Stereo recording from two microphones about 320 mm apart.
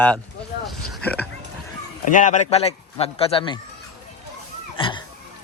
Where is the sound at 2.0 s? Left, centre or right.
Left.